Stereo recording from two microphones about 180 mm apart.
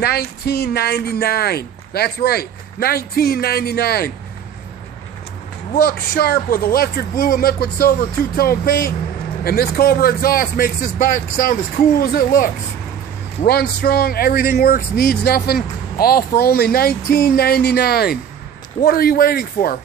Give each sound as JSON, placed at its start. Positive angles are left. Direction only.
{"t": 0.0, "sound": "speech", "side_deg": 60}
{"t": 5.8, "sound": "speech", "side_deg": 60}
{"t": 13.5, "sound": "speech", "side_deg": 60}